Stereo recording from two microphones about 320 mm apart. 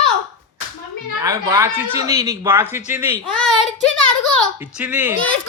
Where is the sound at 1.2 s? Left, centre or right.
Centre.